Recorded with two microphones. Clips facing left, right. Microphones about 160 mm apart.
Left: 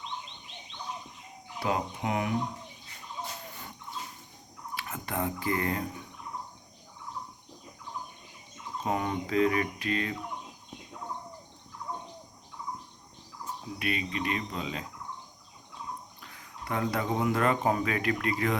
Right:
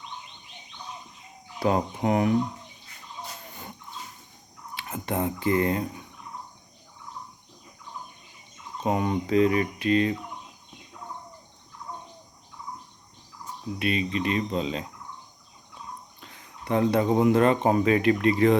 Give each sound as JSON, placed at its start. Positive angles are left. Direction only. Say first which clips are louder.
{"t": 1.5, "sound": "fowl", "louder": "right 6 dB", "side_deg": -40}
{"t": 4.7, "sound": "speech", "louder": "right 5 dB", "side_deg": -25}
{"t": 8.8, "sound": "cricket", "louder": "right 5 dB", "side_deg": -20}
{"t": 13.7, "sound": "cricket", "louder": "right 6 dB", "side_deg": -25}
{"t": 16.2, "sound": "speech", "louder": "right 4 dB", "side_deg": -25}